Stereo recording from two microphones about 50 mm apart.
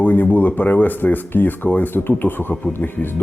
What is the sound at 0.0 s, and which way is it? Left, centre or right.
Speech, left.